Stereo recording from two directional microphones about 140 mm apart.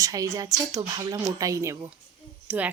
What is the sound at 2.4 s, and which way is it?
Speech, 10° right (ahead or behind).